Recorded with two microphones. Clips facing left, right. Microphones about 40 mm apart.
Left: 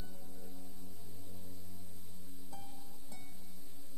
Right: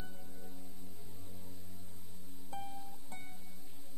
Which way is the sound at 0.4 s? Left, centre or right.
Centre.